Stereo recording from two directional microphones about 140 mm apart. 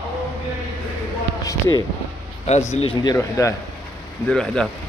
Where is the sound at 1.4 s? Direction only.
25° left (ahead or behind).